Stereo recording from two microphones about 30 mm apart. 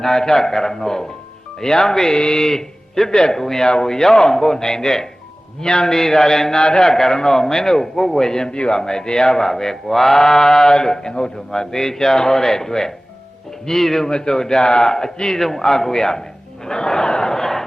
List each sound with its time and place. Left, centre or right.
0.0 s a man's voice: centre
2.1 s a man's voice: left
2.4 s a man's voice: centre
6.6 s a man's voice: left
6.9 s a man's voice: centre
14.1 s a man's voice: left
16.6 s a sound: left